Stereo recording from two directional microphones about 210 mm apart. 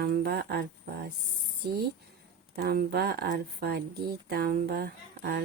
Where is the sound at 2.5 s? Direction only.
45° right (ahead or behind).